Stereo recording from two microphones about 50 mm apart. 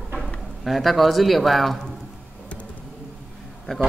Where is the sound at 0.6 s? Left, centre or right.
Centre.